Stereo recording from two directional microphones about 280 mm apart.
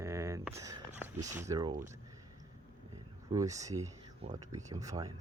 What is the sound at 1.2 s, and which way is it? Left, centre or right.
Speech, centre.